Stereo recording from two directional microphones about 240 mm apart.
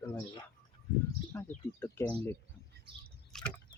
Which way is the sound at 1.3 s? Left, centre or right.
Centre.